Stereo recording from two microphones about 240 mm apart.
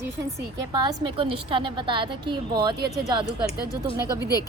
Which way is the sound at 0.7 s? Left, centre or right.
Centre.